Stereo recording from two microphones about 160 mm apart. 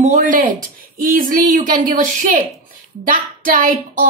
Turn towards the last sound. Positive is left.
turn(degrees=-55)  # may be behind; listen again after turning